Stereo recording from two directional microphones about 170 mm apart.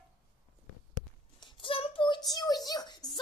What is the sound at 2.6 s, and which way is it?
Speech, 25° left (ahead or behind).